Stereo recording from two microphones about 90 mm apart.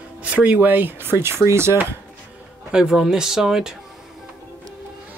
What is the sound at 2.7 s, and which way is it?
Speech, 5° right (ahead or behind).